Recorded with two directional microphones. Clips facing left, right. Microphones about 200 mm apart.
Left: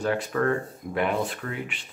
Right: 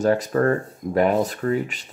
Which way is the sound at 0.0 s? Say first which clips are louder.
Right 6 dB; 40° right (ahead or behind).